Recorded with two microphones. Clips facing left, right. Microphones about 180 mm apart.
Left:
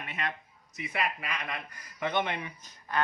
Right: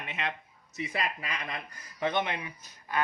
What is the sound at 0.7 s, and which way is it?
Speech, 30° right (ahead or behind).